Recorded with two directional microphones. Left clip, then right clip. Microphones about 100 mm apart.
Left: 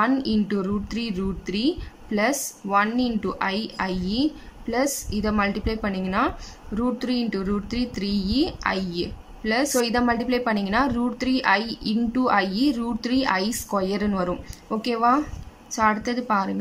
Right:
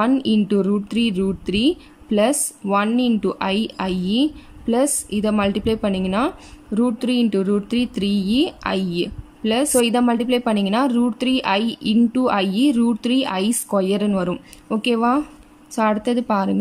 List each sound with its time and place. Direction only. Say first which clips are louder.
0.0 s a woman's voice: right 3 dB; 30° right (ahead or behind)